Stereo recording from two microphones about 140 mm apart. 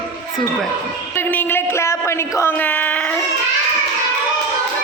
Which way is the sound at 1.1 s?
15° left (ahead or behind).